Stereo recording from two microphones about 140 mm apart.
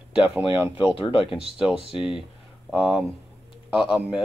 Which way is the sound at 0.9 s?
40° left (ahead or behind).